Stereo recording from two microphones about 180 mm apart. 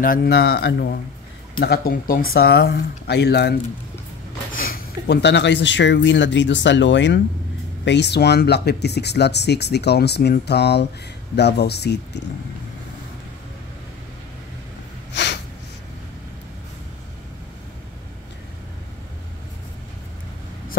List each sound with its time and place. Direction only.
0.0 s speech: 55° left (ahead or behind)
4.6 s speech: 60° left (ahead or behind); by 7.2 s 85° left
7.8 s speech: 75° left (ahead or behind)
15.2 s snort: 75° left (ahead or behind)